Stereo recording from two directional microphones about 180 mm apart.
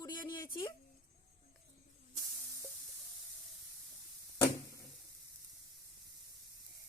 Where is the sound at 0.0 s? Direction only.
25° left (ahead or behind).